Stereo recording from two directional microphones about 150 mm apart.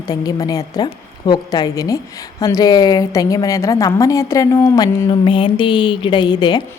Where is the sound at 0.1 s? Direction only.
25° left (ahead or behind).